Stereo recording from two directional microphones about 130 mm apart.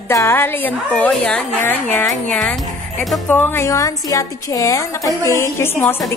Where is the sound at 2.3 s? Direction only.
5° left (ahead or behind).